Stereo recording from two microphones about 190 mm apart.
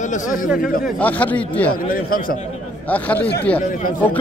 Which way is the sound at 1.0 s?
10° left (ahead or behind).